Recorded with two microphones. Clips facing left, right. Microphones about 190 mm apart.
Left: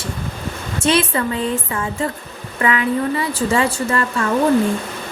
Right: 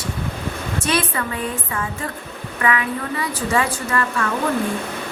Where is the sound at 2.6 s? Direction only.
25° left (ahead or behind).